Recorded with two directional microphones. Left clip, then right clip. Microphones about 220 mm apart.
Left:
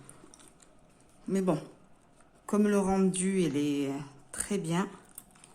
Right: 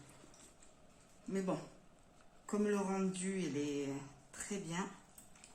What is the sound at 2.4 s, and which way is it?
Speech, 50° left (ahead or behind).